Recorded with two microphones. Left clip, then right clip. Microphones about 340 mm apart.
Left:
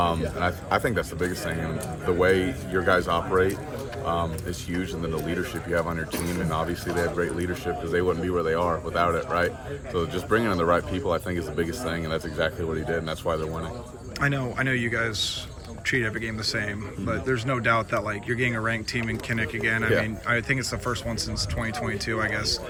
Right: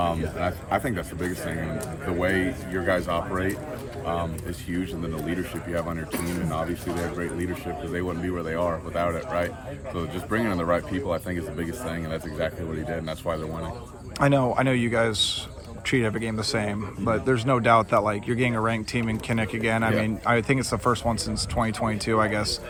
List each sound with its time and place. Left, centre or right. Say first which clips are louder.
0.3 s speech: left 1 dB; centre
2.0 s speech: left 4 dB; centre
7.9 s speech: left 7 dB; centre
14.2 s speech: right 5 dB; centre